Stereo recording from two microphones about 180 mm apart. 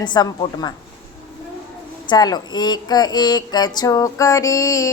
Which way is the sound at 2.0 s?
20° left (ahead or behind).